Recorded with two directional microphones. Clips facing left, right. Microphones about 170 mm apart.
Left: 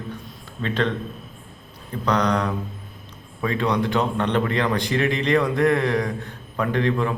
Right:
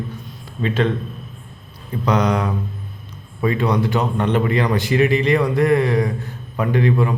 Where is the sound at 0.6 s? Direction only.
10° right (ahead or behind).